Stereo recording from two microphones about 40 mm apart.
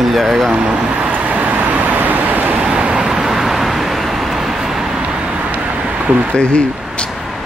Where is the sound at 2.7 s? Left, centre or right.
Right.